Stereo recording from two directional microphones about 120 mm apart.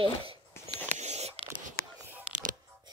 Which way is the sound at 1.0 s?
65° right (ahead or behind).